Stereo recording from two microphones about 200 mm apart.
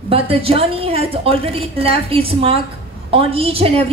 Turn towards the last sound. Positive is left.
turn(degrees=-30)  # may be behind; listen again after turning